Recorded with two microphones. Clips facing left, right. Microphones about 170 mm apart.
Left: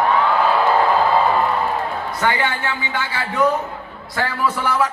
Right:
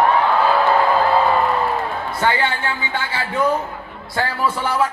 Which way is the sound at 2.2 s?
25° right (ahead or behind).